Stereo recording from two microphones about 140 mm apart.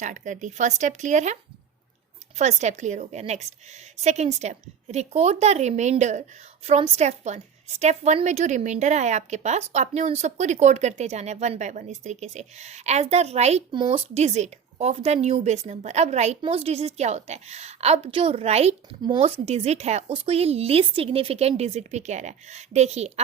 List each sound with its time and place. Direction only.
0.0 s a woman's voice: 65° right (ahead or behind)
13.7 s a woman's voice: 35° right (ahead or behind)
19.0 s speech: 35° right (ahead or behind)
19.5 s a woman's voice: 50° right (ahead or behind)